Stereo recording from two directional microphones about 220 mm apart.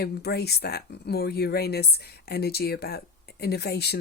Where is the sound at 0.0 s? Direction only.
45° left (ahead or behind).